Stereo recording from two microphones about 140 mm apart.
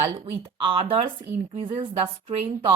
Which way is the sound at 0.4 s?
40° right (ahead or behind).